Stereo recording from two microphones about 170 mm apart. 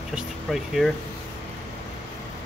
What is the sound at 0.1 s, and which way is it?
Speech, centre (ahead or behind).